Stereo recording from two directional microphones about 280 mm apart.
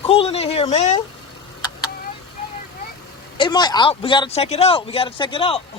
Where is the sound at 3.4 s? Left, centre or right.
Centre.